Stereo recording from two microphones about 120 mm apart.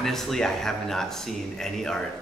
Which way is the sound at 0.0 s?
Centre (ahead or behind).